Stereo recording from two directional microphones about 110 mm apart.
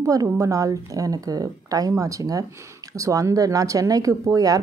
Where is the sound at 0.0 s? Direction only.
30° right (ahead or behind).